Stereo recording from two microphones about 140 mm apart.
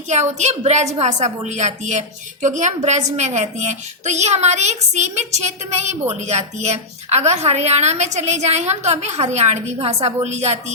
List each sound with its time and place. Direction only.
0.1 s a woman's voice: 55° right (ahead or behind)